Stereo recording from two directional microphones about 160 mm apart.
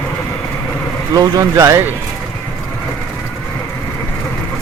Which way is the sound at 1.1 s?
25° right (ahead or behind).